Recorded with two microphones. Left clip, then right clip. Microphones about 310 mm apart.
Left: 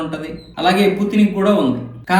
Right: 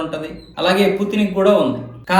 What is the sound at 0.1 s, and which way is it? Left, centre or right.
A man's voice, centre.